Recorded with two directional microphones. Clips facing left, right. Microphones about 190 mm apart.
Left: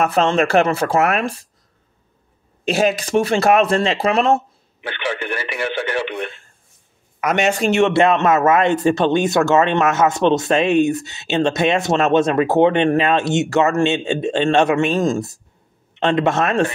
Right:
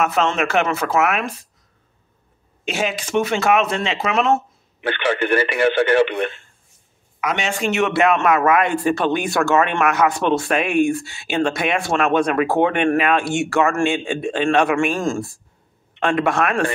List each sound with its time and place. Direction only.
0.0 s speech: 35° left (ahead or behind)
2.6 s speech: 35° left (ahead or behind)
4.8 s speech: 65° right (ahead or behind)
7.2 s a man's voice: 45° left (ahead or behind); by 16.6 s 25° left (ahead or behind)